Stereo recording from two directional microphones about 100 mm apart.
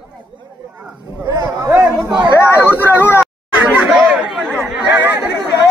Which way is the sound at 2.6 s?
20° left (ahead or behind).